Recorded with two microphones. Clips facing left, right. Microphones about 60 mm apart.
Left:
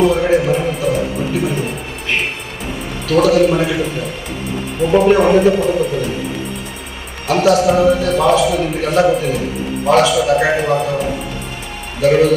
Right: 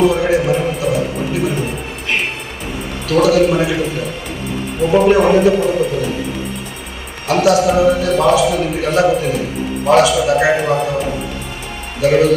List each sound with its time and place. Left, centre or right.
0.0 s music: centre
3.1 s a man's voice: centre
7.2 s a man's voice: centre